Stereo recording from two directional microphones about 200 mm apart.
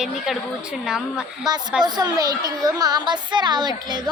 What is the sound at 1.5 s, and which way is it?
A woman's voice, 20° right (ahead or behind).